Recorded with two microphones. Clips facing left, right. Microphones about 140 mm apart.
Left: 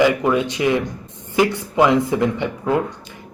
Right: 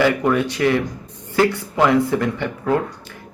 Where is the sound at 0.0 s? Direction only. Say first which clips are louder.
Left 1 dB; 15° left (ahead or behind).